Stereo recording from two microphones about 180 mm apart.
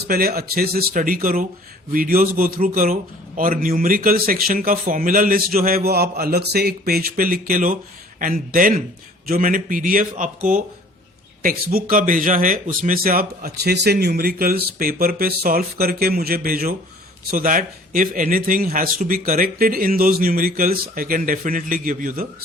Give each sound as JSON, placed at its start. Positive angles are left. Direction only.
{"t": 0.0, "sound": "a man's voice", "side_deg": -55}